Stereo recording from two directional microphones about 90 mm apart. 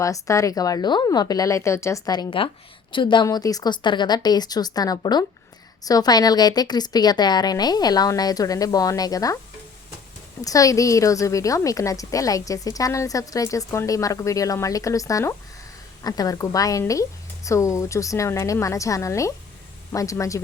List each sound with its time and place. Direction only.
0.0 s a woman's voice: 35° left (ahead or behind)
2.4 s a woman's voice: 75° left (ahead or behind)
2.9 s speech: 65° left (ahead or behind)
3.2 s a woman's voice: 40° left (ahead or behind)
10.4 s a woman's voice: 40° left (ahead or behind)
16.0 s a woman's voice: 45° left (ahead or behind)